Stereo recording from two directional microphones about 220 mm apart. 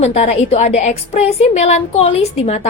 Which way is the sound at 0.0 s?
30° left (ahead or behind).